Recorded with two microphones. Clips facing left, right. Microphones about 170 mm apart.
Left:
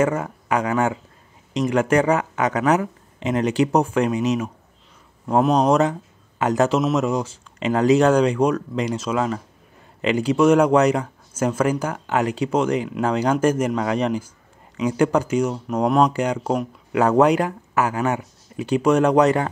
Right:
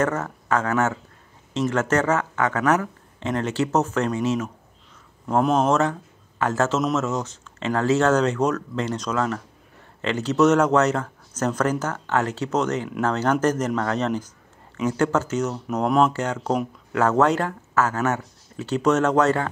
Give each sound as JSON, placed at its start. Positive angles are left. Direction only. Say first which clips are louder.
{"t": 0.0, "sound": "speech", "louder": "left 3 dB", "side_deg": 10}
{"t": 5.2, "sound": "a man's voice", "louder": "left 2 dB", "side_deg": 5}
{"t": 5.7, "sound": "a man's voice", "louder": "left 3 dB", "side_deg": 15}
{"t": 16.1, "sound": "speech", "louder": "left 3 dB", "side_deg": 15}